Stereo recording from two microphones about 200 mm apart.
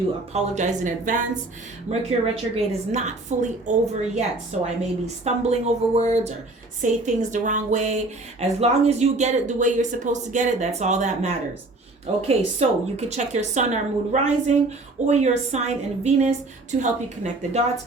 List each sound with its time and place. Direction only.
0.3 s a woman's voice: 35° right (ahead or behind)